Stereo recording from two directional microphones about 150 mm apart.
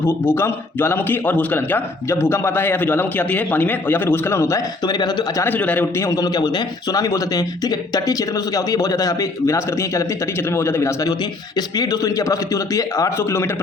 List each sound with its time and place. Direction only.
0.3 s a man's voice: 15° left (ahead or behind)
5.4 s a man's voice: 10° left (ahead or behind)
6.1 s a man's voice: 25° left (ahead or behind)